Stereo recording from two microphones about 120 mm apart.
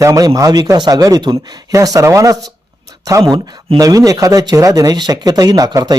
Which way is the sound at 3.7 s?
30° right (ahead or behind).